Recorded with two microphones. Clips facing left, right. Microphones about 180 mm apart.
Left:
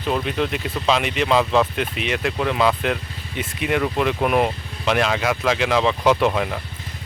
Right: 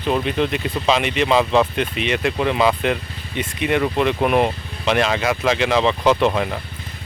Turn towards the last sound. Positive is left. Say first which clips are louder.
# right 1 dB
turn(degrees=0)  # may be behind; listen again after turning